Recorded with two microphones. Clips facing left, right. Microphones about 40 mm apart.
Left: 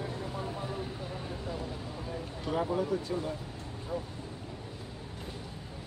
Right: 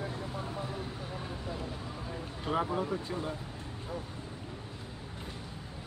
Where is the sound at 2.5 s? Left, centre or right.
Right.